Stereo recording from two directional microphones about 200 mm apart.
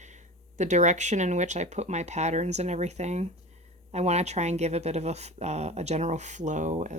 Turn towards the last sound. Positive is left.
turn(degrees=-40)  # may be behind; listen again after turning